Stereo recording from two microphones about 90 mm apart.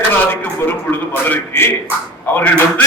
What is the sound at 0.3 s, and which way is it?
A man's voice, 20° left (ahead or behind).